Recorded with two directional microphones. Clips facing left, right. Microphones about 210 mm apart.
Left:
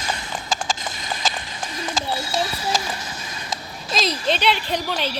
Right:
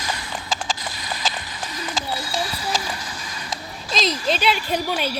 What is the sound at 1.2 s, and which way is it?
Clip-clop, 45° left (ahead or behind).